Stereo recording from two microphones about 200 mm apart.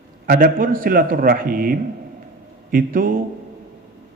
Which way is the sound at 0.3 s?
45° right (ahead or behind).